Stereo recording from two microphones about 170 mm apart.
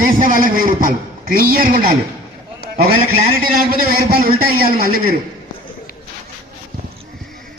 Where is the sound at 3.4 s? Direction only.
60° right (ahead or behind).